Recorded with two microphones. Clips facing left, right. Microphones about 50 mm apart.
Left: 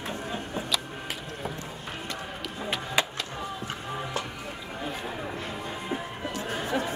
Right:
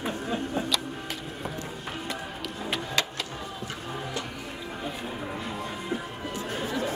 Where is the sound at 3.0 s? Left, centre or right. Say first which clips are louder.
Left 3 dB; centre.